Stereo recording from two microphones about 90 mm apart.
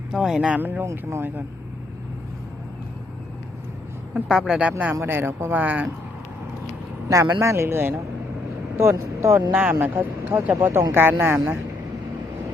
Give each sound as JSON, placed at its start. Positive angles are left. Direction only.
{"t": 0.1, "sound": "speech", "side_deg": -5}
{"t": 4.1, "sound": "speech", "side_deg": -5}
{"t": 5.0, "sound": "speech", "side_deg": -25}
{"t": 7.1, "sound": "speech", "side_deg": -40}